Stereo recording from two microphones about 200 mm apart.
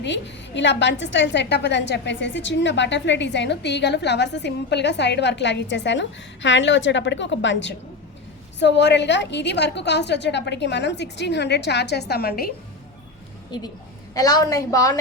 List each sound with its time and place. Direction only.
0.0 s a woman's voice: 60° left (ahead or behind)
13.5 s a woman's voice: 20° left (ahead or behind)